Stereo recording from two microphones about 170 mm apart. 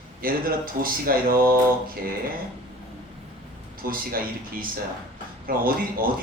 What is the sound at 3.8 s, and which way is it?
Speech, 60° right (ahead or behind).